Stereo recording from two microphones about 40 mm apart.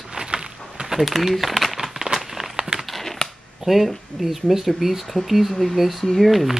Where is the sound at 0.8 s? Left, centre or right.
Centre.